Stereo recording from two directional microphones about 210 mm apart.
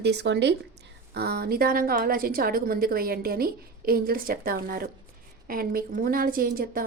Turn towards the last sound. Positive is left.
turn(degrees=-45)  # may be behind; listen again after turning